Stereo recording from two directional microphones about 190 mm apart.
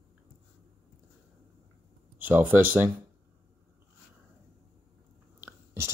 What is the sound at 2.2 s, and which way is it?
Speech, 10° right (ahead or behind).